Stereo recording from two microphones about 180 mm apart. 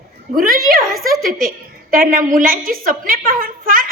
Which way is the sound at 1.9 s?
50° right (ahead or behind).